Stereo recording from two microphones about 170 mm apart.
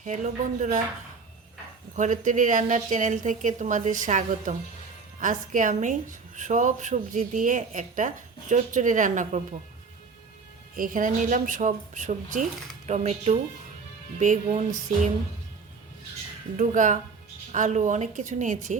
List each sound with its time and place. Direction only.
0.0 s a woman's voice: 50° right (ahead or behind)
2.0 s a woman's voice: 50° right (ahead or behind)
10.8 s a woman's voice: 50° right (ahead or behind)
16.6 s a woman's voice: 50° right (ahead or behind)